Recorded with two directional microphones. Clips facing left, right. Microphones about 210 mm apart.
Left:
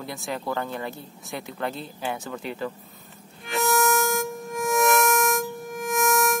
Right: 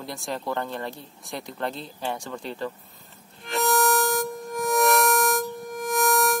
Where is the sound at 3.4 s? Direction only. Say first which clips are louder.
Even; centre (ahead or behind).